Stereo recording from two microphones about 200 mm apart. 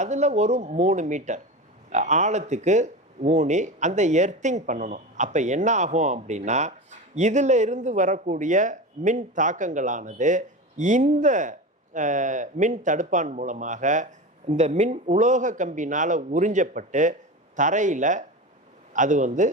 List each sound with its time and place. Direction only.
0.0 s speech: 35° right (ahead or behind)